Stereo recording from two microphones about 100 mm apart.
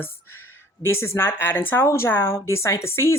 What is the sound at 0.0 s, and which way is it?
Speech, 25° left (ahead or behind).